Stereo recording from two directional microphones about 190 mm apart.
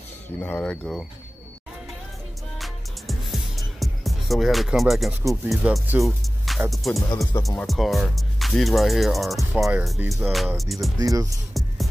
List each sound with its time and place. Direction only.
0.4 s speech: 5° left (ahead or behind)
2.6 s music: centre (ahead or behind)
6.7 s speech: centre (ahead or behind)
11.0 s speech: 15° right (ahead or behind)
11.6 s music: centre (ahead or behind)